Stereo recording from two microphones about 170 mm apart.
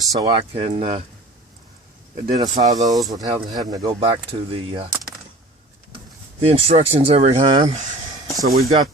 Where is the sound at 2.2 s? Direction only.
25° right (ahead or behind).